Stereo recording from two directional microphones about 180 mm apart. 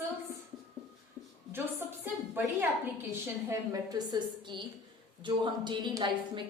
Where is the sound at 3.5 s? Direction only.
20° right (ahead or behind).